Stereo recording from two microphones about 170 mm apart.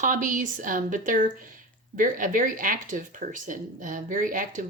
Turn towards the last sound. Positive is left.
turn(degrees=-50)  # may be behind; listen again after turning